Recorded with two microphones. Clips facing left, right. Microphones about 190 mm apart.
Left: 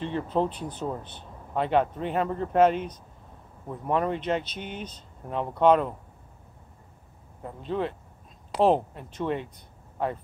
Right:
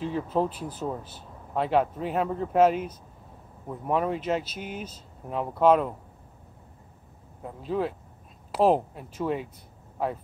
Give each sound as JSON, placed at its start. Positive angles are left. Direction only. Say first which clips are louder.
{"t": 0.0, "sound": "speech", "louder": "even", "side_deg": -5}
{"t": 7.4, "sound": "speech", "louder": "right 1 dB", "side_deg": -5}